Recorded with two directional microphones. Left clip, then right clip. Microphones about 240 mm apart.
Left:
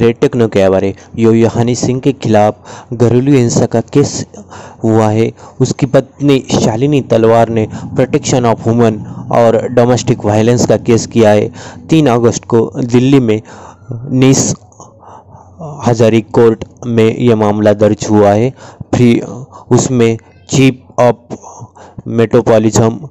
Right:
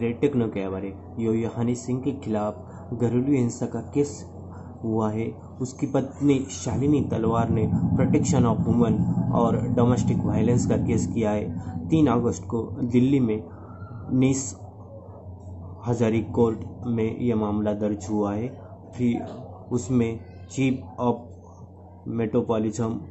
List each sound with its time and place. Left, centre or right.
0.0 s speech: left
15.8 s speech: left